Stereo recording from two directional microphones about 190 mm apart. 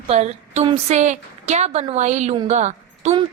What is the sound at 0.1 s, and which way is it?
A woman's voice, 35° right (ahead or behind).